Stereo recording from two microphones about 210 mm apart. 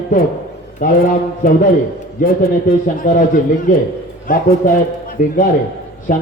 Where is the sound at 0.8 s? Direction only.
40° left (ahead or behind).